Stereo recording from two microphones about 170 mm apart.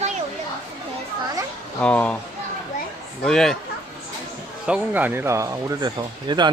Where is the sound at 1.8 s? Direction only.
5° left (ahead or behind).